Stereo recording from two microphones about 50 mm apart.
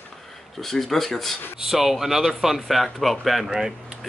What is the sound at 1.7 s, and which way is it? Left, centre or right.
Speech, centre.